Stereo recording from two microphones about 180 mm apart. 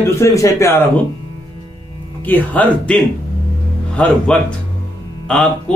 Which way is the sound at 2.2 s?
10° left (ahead or behind).